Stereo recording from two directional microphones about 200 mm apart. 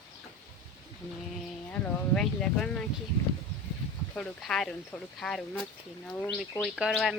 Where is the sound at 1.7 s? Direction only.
5° left (ahead or behind).